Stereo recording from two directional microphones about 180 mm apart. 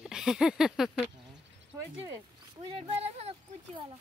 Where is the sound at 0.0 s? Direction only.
5° right (ahead or behind).